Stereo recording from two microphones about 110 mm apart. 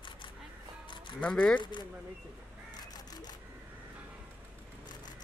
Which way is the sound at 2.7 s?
35° left (ahead or behind).